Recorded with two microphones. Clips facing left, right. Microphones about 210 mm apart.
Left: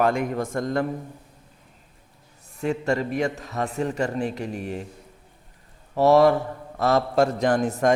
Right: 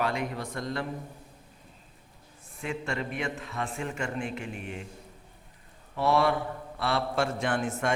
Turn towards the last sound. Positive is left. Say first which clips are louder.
# left 8 dB
turn(degrees=40)  # may be behind; listen again after turning